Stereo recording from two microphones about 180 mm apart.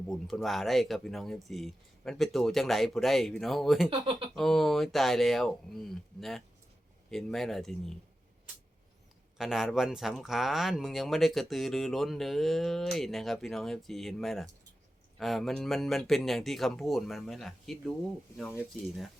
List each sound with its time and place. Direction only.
0.1 s speech: centre (ahead or behind)
3.8 s speech: 30° right (ahead or behind)
4.4 s speech: centre (ahead or behind)
9.4 s speech: centre (ahead or behind)